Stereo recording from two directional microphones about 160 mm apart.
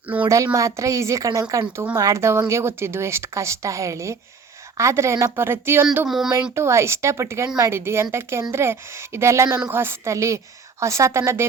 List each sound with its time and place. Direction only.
0.1 s a woman's voice: 15° right (ahead or behind)
6.1 s a sound: 5° right (ahead or behind)
6.6 s a woman's voice: 15° right (ahead or behind)